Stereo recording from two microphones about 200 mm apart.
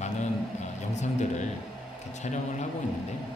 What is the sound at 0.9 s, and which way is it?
Speech, 35° left (ahead or behind).